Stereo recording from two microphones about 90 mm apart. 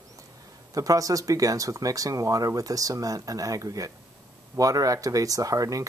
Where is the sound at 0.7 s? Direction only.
40° right (ahead or behind).